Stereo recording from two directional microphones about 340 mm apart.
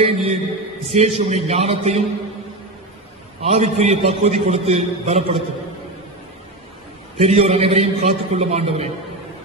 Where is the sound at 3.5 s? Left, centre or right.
Centre.